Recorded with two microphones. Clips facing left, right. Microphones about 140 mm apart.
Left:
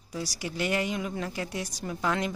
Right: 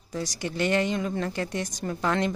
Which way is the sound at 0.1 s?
5° left (ahead or behind).